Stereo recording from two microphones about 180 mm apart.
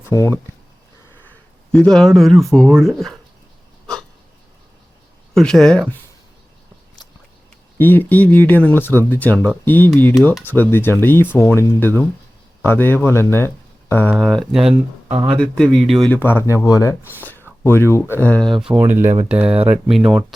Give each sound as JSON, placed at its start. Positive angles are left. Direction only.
{"t": 0.0, "sound": "speech", "side_deg": 15}
{"t": 1.7, "sound": "speech", "side_deg": 5}
{"t": 5.3, "sound": "speech", "side_deg": 5}
{"t": 7.8, "sound": "speech", "side_deg": 10}
{"t": 10.2, "sound": "speech", "side_deg": 0}
{"t": 15.0, "sound": "speech", "side_deg": -25}
{"t": 15.3, "sound": "speech", "side_deg": 0}
{"t": 18.7, "sound": "speech", "side_deg": -10}